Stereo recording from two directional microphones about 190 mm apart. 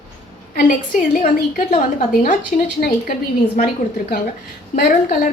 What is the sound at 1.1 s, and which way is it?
Speech, 50° left (ahead or behind).